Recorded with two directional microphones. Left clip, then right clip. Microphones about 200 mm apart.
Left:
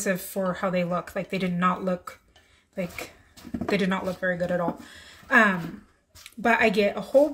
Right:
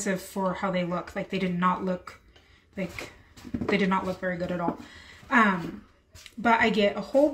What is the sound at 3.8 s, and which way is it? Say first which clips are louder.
Speech: even; 35° left (ahead or behind).